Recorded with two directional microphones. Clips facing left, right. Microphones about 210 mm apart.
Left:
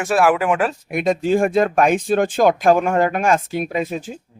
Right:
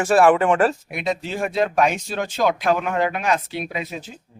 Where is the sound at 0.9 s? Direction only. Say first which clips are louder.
Left 8 dB; 50° left (ahead or behind).